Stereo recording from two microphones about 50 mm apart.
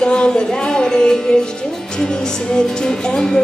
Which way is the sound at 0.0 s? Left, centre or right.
Centre.